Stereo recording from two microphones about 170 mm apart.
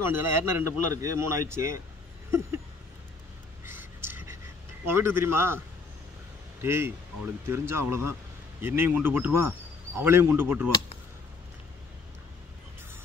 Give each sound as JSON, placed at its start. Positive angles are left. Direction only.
{"t": 0.0, "sound": "a man's voice", "side_deg": -15}
{"t": 3.6, "sound": "a sound", "side_deg": -15}
{"t": 4.8, "sound": "a man's voice", "side_deg": -15}
{"t": 6.6, "sound": "a man's voice", "side_deg": -15}